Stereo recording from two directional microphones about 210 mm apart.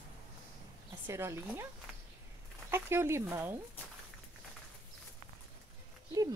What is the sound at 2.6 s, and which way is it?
Speech, 10° right (ahead or behind).